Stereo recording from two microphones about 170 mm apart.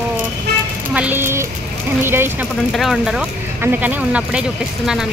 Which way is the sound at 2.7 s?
Centre (ahead or behind).